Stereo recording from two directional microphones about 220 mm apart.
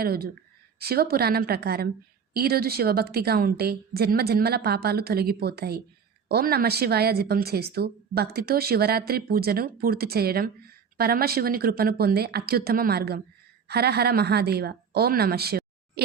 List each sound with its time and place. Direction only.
0.0 s speech: 45° right (ahead or behind)